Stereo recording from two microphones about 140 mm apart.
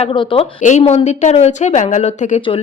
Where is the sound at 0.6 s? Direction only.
55° left (ahead or behind).